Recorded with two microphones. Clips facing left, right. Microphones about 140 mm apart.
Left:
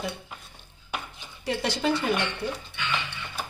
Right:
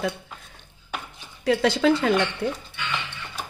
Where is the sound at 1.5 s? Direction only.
90° right.